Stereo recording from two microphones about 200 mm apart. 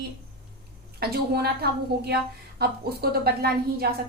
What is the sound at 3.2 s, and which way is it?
Speech, 50° right (ahead or behind).